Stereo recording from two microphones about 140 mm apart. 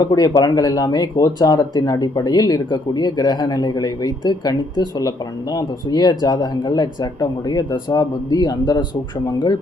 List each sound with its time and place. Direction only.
0.0 s speech: 30° left (ahead or behind)